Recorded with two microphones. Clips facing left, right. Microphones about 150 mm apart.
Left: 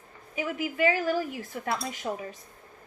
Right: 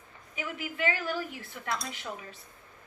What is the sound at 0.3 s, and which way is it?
A woman's voice, 45° left (ahead or behind).